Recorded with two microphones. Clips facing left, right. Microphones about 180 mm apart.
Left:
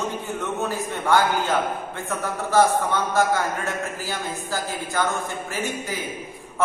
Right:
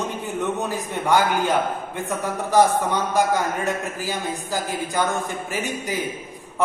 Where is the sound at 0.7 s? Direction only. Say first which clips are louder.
Left 1 dB; 15° right (ahead or behind).